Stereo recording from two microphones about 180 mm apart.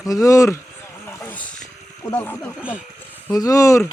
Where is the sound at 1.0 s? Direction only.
10° left (ahead or behind).